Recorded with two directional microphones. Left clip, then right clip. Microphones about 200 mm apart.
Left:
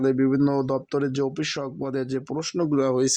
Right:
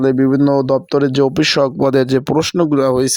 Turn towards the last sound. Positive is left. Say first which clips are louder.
# right 9 dB
turn(degrees=-40)  # may be behind; listen again after turning